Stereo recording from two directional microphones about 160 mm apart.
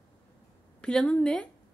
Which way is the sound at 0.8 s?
5° left (ahead or behind).